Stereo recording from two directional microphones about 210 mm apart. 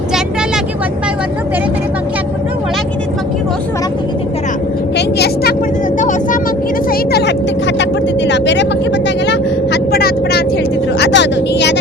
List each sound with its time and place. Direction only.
4.9 s vehicle: 50° left (ahead or behind)
6.0 s vehicle: 35° left (ahead or behind)
6.9 s vehicle: 50° left (ahead or behind)